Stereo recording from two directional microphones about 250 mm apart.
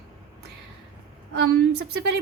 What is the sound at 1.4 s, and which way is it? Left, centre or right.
Speech, right.